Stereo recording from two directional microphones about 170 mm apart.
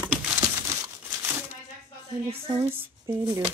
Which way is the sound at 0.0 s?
20° right (ahead or behind).